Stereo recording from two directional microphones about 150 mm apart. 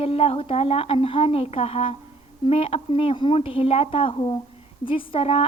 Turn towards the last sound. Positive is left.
turn(degrees=40)  # may be behind; listen again after turning